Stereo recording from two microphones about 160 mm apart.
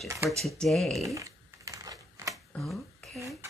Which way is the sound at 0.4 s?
Centre (ahead or behind).